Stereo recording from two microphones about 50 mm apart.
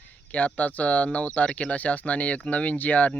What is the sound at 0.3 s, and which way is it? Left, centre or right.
Speech, left.